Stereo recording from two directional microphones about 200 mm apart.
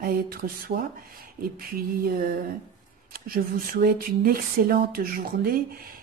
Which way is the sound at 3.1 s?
45° right (ahead or behind).